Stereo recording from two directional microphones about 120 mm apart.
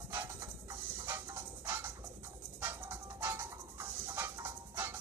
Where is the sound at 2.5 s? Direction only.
20° right (ahead or behind).